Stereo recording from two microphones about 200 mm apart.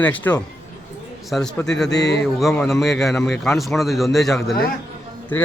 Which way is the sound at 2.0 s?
60° left (ahead or behind).